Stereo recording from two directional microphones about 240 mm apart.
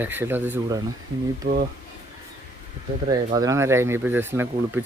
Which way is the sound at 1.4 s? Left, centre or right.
Right.